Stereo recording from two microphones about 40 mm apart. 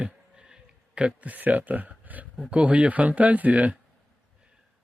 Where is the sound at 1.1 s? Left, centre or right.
Right.